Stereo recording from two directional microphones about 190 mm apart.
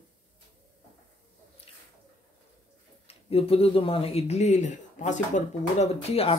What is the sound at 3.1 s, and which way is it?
Speech, 30° left (ahead or behind).